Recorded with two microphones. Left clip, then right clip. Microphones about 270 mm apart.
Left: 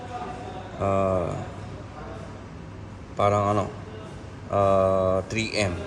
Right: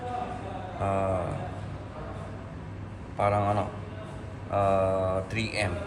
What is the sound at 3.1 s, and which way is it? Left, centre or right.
Mantra, left.